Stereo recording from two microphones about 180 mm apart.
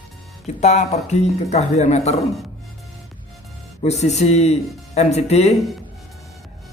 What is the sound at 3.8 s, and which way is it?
Speech, 40° left (ahead or behind).